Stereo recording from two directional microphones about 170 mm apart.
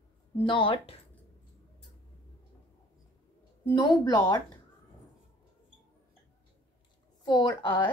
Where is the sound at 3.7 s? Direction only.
25° left (ahead or behind).